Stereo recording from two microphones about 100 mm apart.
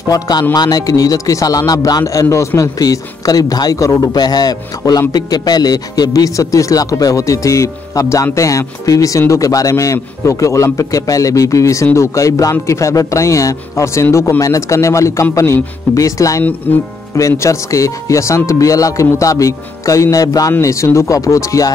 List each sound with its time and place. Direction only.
0.1 s speech: 40° left (ahead or behind)
16.7 s speech: 15° left (ahead or behind)
17.1 s speech: 30° left (ahead or behind)